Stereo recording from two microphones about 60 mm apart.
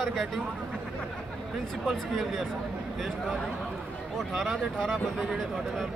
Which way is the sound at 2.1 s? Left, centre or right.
Centre.